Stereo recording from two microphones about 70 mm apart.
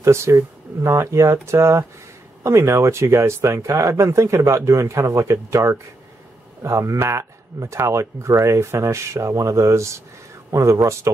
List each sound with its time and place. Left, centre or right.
0.0 s speech: right